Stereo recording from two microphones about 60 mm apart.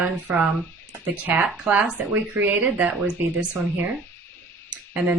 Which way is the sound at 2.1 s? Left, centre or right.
Right.